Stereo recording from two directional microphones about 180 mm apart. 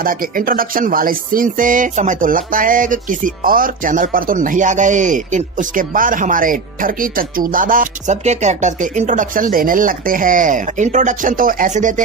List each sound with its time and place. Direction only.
0.0 s speech: 50° right (ahead or behind)